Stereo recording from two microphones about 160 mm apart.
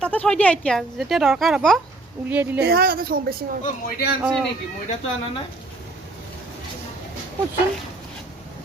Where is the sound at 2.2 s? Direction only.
10° right (ahead or behind).